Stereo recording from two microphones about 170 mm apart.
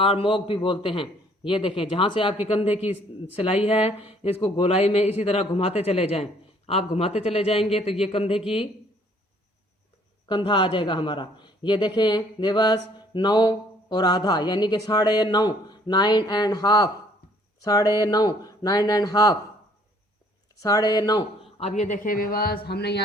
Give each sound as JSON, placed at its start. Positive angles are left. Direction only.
{"t": 0.0, "sound": "speech", "side_deg": 30}
{"t": 10.2, "sound": "a man's voice", "side_deg": 25}
{"t": 20.6, "sound": "a man's voice", "side_deg": 20}
{"t": 21.6, "sound": "speech", "side_deg": 45}